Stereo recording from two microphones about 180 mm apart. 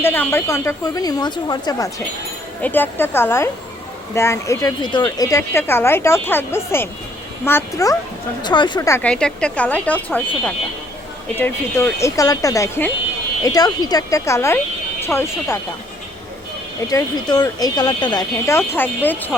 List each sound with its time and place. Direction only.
0.0 s a woman's voice: 10° left (ahead or behind)
2.6 s a woman's voice: 10° left (ahead or behind)
9.0 s a woman's voice: 5° left (ahead or behind)
16.9 s speech: 20° left (ahead or behind)